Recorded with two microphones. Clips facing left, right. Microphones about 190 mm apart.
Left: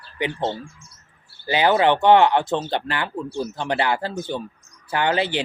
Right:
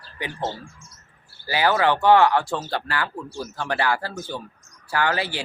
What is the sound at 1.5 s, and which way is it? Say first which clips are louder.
Speech: left 3 dB; 20° left (ahead or behind).